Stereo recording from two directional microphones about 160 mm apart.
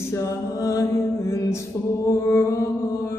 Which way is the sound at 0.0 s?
20° left (ahead or behind).